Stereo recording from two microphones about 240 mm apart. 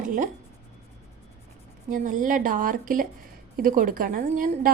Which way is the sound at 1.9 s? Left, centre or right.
Right.